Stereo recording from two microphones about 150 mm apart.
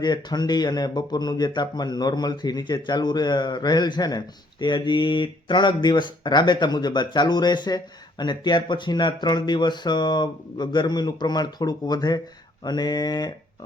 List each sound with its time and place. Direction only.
0.0 s speech: 30° left (ahead or behind)